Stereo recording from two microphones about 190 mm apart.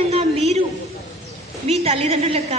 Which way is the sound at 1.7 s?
35° right (ahead or behind).